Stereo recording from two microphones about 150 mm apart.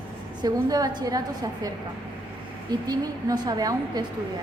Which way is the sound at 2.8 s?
25° right (ahead or behind).